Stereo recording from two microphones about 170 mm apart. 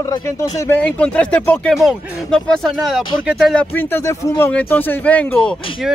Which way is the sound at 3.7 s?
10° left (ahead or behind).